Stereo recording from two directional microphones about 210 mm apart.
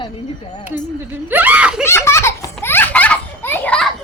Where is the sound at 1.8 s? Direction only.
10° left (ahead or behind).